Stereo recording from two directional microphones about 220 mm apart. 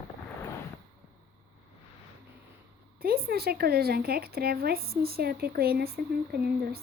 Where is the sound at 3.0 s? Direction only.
45° right (ahead or behind).